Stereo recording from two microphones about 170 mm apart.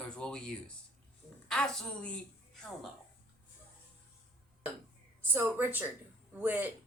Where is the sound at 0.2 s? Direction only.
5° left (ahead or behind).